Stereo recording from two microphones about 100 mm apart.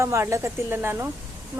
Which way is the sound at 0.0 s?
30° right (ahead or behind).